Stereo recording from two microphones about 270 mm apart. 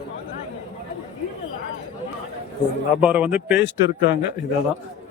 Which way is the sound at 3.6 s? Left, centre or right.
Left.